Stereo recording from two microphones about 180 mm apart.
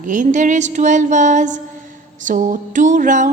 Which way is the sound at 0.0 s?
45° right (ahead or behind).